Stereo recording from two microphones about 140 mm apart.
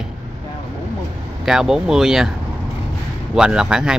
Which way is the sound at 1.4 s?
5° right (ahead or behind).